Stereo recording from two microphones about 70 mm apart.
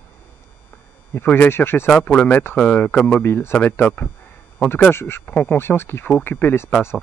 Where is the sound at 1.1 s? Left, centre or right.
Left.